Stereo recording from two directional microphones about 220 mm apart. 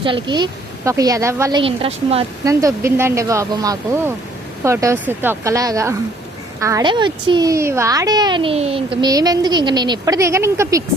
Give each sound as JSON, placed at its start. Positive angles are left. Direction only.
{"t": 0.0, "sound": "a woman's voice", "side_deg": -20}
{"t": 2.4, "sound": "a woman's voice", "side_deg": -15}